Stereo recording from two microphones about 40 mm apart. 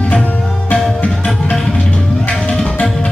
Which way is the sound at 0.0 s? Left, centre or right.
Left.